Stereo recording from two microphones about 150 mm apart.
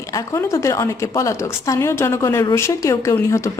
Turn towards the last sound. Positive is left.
turn(degrees=20)  # may be behind; listen again after turning